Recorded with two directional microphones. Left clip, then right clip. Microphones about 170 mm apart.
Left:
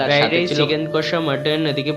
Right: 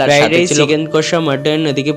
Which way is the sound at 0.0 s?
45° right (ahead or behind).